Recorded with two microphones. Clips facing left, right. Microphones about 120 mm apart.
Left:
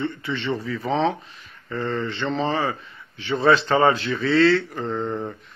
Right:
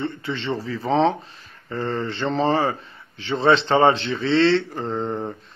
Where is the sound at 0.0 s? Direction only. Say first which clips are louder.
Even; 30° right (ahead or behind).